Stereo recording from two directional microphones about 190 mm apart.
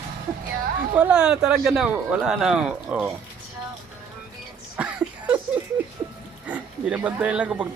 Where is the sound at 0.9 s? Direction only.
5° right (ahead or behind).